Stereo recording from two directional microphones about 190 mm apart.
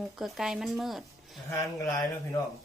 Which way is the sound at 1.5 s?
15° left (ahead or behind).